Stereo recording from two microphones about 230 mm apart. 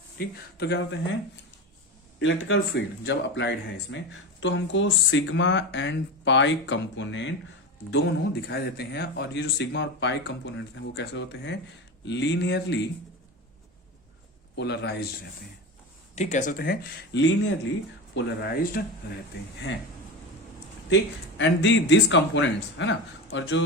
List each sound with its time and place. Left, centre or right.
0.2 s speech: left
2.1 s speech: left
14.5 s speech: left
16.1 s speech: left
20.9 s speech: left